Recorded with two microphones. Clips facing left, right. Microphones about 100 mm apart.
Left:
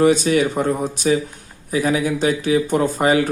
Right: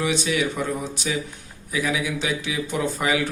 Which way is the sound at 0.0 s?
45° left (ahead or behind).